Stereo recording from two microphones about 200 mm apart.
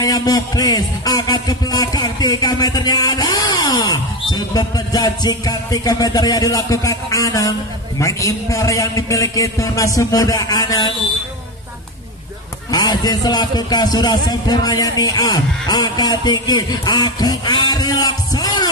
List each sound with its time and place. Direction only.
0.0 s music: 20° left (ahead or behind)
8.0 s a man's voice: 15° left (ahead or behind)
12.7 s music: 20° left (ahead or behind)